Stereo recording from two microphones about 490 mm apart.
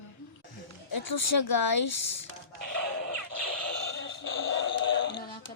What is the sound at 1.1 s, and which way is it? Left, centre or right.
Speech, left.